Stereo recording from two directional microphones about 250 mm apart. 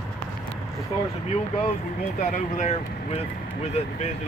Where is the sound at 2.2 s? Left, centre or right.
Left.